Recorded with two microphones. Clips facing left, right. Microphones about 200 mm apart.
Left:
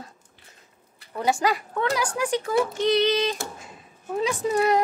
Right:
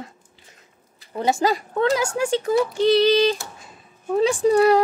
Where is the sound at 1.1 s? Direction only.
25° right (ahead or behind).